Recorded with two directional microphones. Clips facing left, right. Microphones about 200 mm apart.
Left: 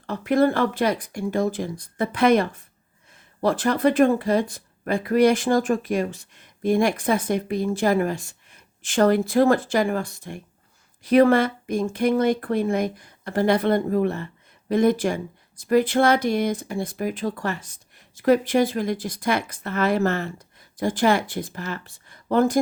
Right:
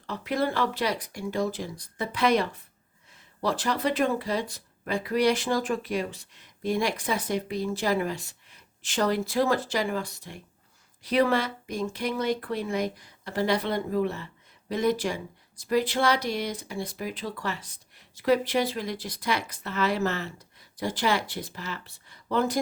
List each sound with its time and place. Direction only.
0.0 s speech: 50° left (ahead or behind)